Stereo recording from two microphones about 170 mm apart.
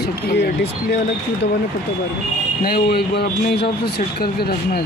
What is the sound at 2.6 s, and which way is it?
Speech, 65° left (ahead or behind).